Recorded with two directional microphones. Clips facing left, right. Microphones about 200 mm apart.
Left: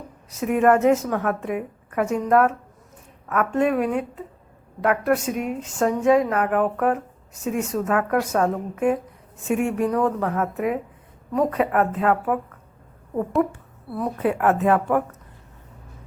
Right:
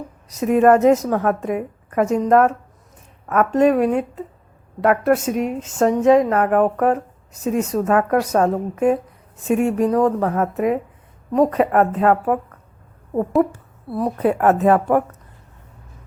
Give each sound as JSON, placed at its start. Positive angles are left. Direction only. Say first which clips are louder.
{"t": 0.3, "sound": "a woman's voice", "louder": "right 4 dB", "side_deg": -35}
{"t": 13.9, "sound": "a woman's voice", "louder": "right 4 dB", "side_deg": -35}